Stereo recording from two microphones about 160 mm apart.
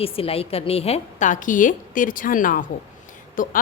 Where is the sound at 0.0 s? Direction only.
35° left (ahead or behind).